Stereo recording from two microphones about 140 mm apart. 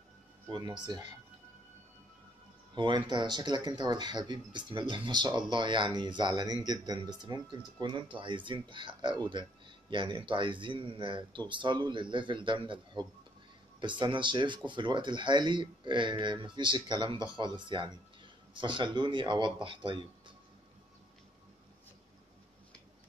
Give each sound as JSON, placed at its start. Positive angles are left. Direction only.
{"t": 0.5, "sound": "speech", "side_deg": -35}
{"t": 2.7, "sound": "speech", "side_deg": -35}